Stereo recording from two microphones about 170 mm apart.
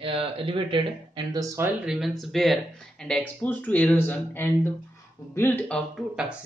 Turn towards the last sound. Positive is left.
turn(degrees=-5)  # may be behind; listen again after turning